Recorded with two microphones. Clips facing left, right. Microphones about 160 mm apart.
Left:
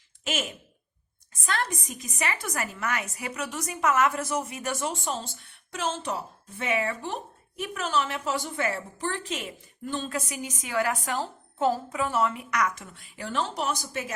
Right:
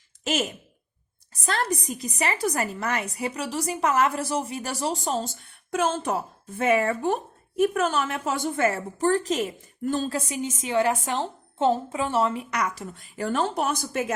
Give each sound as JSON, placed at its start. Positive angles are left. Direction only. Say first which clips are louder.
{"t": 1.3, "sound": "a woman's voice", "louder": "right 4 dB", "side_deg": -35}